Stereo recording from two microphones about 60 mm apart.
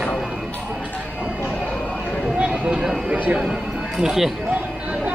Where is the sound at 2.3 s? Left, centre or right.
Centre.